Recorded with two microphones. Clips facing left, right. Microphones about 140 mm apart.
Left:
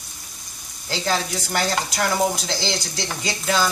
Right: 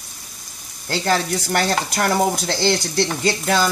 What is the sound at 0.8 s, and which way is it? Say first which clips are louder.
Frying: right 4 dB; 55° right (ahead or behind).